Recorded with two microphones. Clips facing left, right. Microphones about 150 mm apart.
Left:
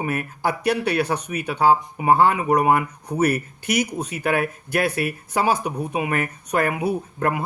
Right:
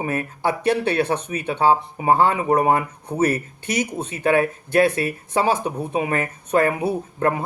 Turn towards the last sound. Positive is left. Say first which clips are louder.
# right 2 dB
turn(degrees=-30)  # may be behind; listen again after turning